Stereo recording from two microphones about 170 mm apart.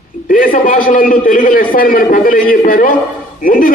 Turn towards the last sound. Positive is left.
turn(degrees=55)  # may be behind; listen again after turning